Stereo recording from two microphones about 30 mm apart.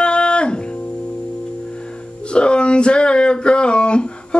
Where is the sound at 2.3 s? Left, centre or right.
Left.